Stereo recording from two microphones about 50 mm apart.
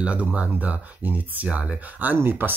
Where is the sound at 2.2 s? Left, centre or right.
Right.